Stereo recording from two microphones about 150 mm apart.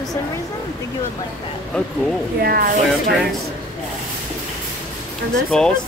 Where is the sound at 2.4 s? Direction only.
90° right.